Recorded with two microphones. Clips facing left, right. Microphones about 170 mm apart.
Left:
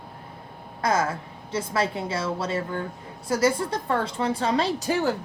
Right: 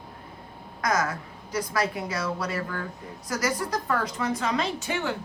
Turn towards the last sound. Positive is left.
turn(degrees=35)  # may be behind; listen again after turning